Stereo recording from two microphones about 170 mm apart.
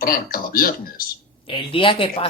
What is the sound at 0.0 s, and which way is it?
Speech, 60° left (ahead or behind).